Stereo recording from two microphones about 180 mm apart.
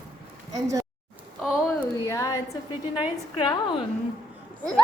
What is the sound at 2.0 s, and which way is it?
A woman's voice, 15° left (ahead or behind).